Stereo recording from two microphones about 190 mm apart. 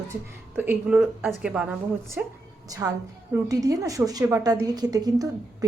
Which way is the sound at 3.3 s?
15° right (ahead or behind).